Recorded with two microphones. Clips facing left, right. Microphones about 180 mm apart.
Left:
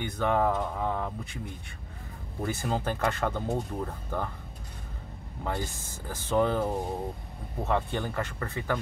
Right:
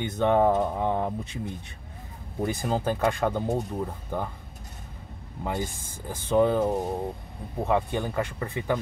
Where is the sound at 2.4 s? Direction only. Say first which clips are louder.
Right 4 dB; 15° right (ahead or behind).